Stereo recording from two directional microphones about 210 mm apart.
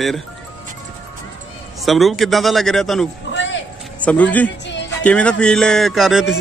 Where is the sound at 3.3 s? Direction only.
60° left (ahead or behind).